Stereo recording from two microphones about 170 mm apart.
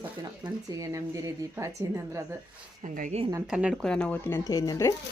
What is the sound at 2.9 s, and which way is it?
Speech, 45° right (ahead or behind).